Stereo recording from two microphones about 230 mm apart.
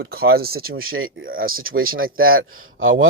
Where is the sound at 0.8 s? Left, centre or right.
Right.